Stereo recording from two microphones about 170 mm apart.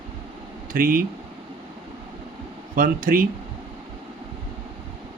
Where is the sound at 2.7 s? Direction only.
55° right (ahead or behind).